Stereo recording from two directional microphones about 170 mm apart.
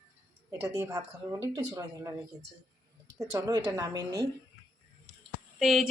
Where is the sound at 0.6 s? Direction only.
15° right (ahead or behind).